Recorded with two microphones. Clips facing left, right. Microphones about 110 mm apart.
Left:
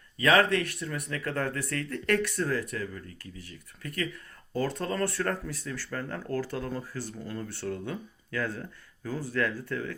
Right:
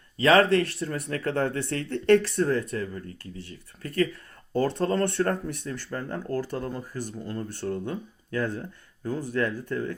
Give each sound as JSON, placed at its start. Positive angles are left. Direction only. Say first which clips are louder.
{"t": 0.2, "sound": "speech", "louder": "right 4 dB", "side_deg": -30}